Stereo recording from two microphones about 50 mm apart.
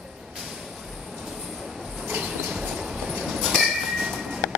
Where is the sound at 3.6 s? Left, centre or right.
Centre.